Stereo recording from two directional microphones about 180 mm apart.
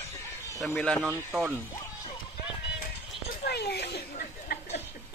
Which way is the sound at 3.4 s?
65° left (ahead or behind).